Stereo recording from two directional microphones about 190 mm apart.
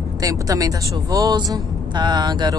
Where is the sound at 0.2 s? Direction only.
20° right (ahead or behind).